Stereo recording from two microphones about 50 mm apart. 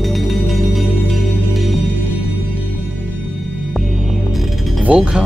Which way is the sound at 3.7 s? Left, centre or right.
Centre.